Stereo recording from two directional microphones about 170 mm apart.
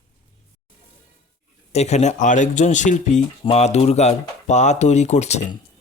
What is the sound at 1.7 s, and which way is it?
Speech, 40° left (ahead or behind).